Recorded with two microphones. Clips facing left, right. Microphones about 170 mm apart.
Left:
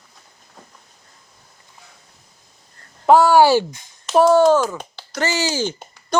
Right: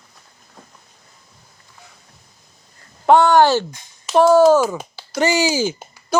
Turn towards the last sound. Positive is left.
turn(degrees=-5)  # may be behind; listen again after turning